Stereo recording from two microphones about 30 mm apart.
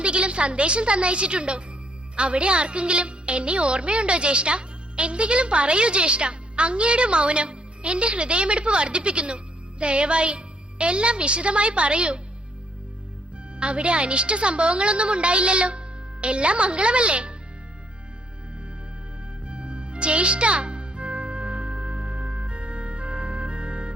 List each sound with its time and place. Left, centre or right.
0.0 s a woman's voice: right
13.6 s a woman's voice: right
19.5 s music: right